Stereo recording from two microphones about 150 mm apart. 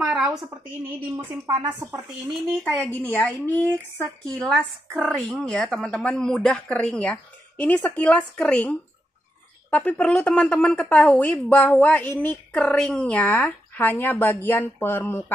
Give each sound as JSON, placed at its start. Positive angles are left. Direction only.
{"t": 0.0, "sound": "a sound", "side_deg": -5}
{"t": 1.4, "sound": "a woman's voice", "side_deg": -30}
{"t": 2.8, "sound": "a woman's voice", "side_deg": 10}
{"t": 5.0, "sound": "speech", "side_deg": -5}
{"t": 5.4, "sound": "speech", "side_deg": 5}